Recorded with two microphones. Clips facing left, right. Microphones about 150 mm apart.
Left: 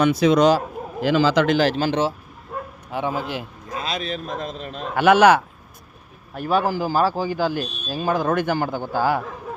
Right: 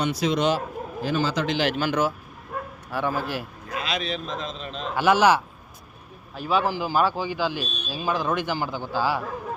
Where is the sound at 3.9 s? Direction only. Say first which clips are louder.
Left 1 dB; 40° left (ahead or behind); by 5.4 s 60° left (ahead or behind).